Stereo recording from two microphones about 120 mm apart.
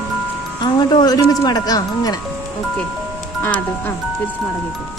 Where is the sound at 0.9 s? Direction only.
35° left (ahead or behind).